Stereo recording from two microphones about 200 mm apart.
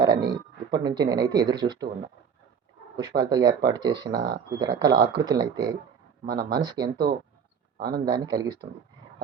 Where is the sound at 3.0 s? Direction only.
20° right (ahead or behind).